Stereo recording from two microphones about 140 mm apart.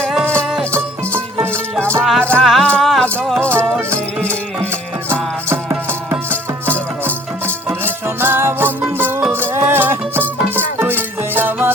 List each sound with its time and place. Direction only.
0.0 s music: centre (ahead or behind)
0.7 s music: 15° right (ahead or behind)
2.0 s music: centre (ahead or behind)
3.5 s music: 15° right (ahead or behind)
4.2 s music: 10° left (ahead or behind)
5.1 s music: 15° right (ahead or behind)